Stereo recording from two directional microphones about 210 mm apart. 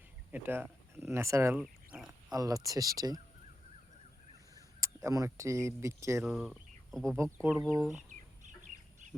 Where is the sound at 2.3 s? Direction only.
15° right (ahead or behind).